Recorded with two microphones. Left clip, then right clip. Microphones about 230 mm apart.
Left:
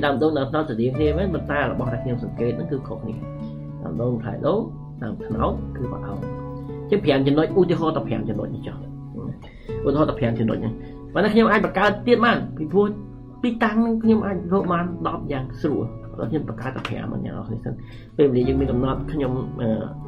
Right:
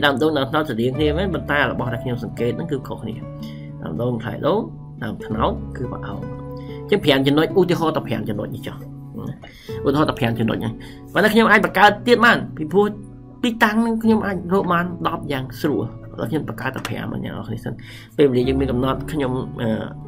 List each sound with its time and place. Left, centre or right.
0.0 s speech: centre
4.0 s speech: centre
6.9 s speech: centre
9.8 s speech: centre